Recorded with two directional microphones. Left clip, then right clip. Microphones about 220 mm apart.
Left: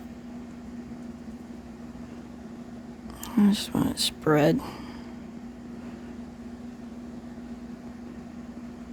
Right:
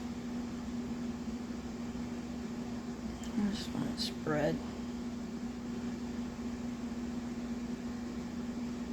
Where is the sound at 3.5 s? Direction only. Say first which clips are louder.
Left 10 dB; 50° left (ahead or behind).